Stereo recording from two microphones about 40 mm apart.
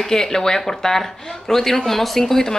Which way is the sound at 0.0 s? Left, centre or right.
Centre.